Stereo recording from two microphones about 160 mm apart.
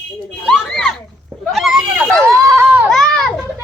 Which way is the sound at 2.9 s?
5° left (ahead or behind).